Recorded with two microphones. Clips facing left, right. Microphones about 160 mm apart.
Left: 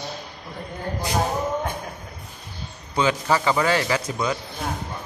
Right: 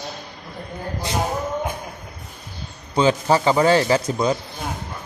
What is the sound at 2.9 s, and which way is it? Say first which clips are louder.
A man's voice: right 4 dB; 30° right (ahead or behind).